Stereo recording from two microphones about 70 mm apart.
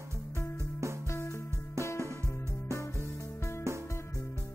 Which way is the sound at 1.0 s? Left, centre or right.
Left.